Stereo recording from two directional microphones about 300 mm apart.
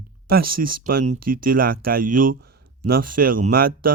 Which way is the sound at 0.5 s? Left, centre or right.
Right.